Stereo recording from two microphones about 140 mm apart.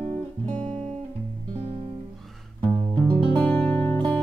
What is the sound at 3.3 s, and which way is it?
Guitar, 10° left (ahead or behind).